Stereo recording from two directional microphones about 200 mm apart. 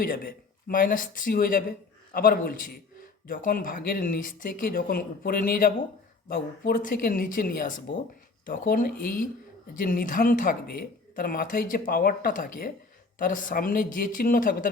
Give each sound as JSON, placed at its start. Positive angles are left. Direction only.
{"t": 0.0, "sound": "speech", "side_deg": 45}